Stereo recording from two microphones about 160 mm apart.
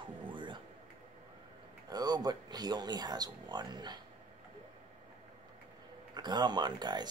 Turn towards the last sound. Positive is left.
turn(degrees=-25)  # may be behind; listen again after turning